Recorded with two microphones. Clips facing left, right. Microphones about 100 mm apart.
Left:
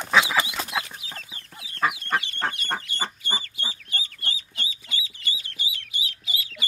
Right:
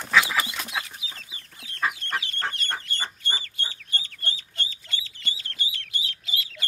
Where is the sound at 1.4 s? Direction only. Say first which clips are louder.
Left 2 dB; 5° left (ahead or behind).